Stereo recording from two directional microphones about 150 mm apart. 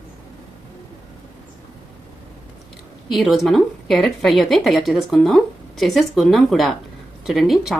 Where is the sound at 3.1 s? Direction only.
Centre (ahead or behind).